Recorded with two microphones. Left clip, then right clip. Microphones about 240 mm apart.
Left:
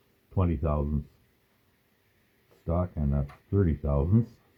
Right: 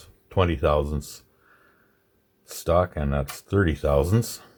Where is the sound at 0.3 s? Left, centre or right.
Right.